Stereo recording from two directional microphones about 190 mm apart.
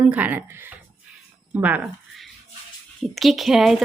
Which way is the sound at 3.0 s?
Centre (ahead or behind).